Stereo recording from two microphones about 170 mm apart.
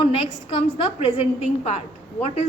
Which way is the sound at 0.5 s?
40° left (ahead or behind).